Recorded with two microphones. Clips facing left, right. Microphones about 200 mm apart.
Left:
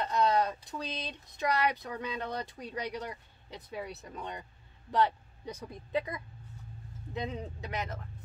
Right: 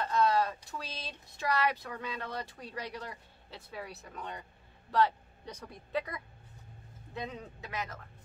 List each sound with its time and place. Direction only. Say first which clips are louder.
0.0 s speech: left 1 dB; 20° left (ahead or behind)